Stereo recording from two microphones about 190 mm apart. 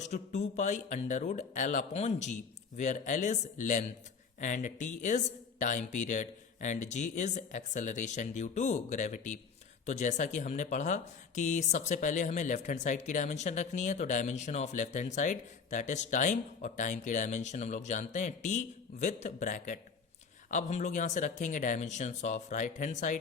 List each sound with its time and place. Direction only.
0.0 s speech: 40° left (ahead or behind)